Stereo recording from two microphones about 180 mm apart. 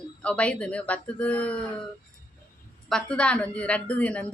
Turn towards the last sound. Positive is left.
turn(degrees=5)  # may be behind; listen again after turning